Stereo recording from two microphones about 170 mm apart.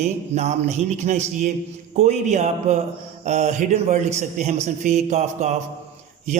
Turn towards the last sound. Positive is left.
turn(degrees=-45)  # may be behind; listen again after turning